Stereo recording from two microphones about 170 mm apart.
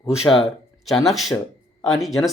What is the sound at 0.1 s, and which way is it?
Speech, 5° right (ahead or behind).